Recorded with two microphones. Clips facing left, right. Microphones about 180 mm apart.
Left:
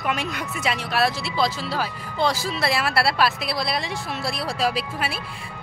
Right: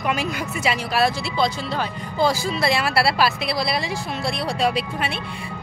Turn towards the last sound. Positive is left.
turn(degrees=0)  # may be behind; listen again after turning